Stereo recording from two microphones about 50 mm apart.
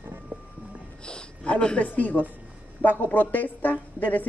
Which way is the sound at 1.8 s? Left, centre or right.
Left.